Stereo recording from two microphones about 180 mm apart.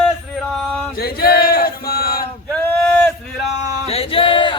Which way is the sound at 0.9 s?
55° left (ahead or behind).